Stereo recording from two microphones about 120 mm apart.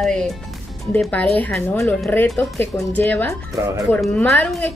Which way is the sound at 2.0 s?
20° left (ahead or behind).